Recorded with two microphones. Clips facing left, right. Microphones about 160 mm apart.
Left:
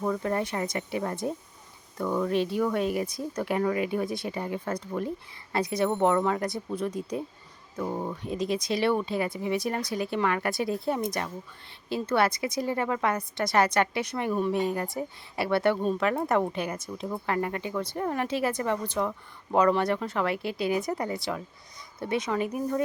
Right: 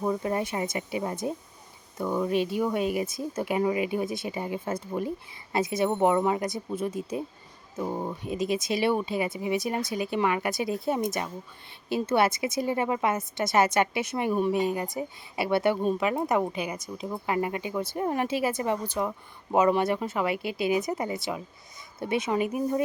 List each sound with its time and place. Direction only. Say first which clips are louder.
0.0 s speech: even; 15° right (ahead or behind)
4.4 s speech: even; 15° right (ahead or behind)
10.7 s speech: even; centre (ahead or behind)
11.9 s a woman's voice: right 1 dB; 20° right (ahead or behind)
18.3 s speech: right 1 dB; 5° right (ahead or behind); by 21.2 s 20° right (ahead or behind)
21.2 s speech: even; 5° right (ahead or behind)
22.0 s speech: right 1 dB; 15° right (ahead or behind)